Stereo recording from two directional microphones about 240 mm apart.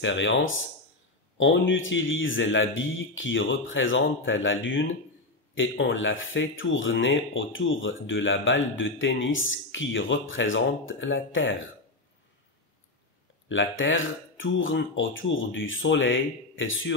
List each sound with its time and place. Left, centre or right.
0.0 s speech: left
13.5 s speech: left